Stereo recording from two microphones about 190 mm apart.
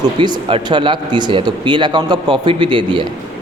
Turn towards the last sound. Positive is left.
turn(degrees=-25)  # may be behind; listen again after turning